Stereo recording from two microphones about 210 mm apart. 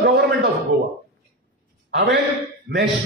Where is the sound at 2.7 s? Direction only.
45° right (ahead or behind).